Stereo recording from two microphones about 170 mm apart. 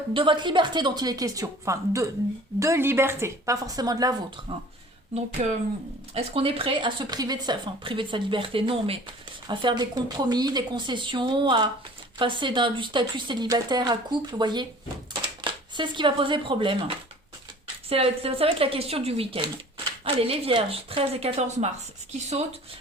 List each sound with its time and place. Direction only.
0.1 s speech: 30° right (ahead or behind)
5.4 s speech: 45° right (ahead or behind)
6.1 s speech: 35° right (ahead or behind)
17.8 s speech: 35° right (ahead or behind)